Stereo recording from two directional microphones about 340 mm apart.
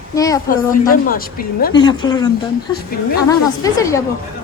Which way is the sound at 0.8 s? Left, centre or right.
Left.